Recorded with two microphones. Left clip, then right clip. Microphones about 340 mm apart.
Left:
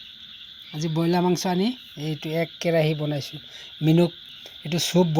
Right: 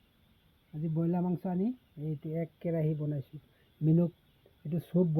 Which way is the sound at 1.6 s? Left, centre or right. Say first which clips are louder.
Left 10 dB; left.